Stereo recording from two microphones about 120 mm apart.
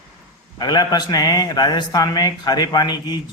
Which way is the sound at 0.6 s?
35° left (ahead or behind).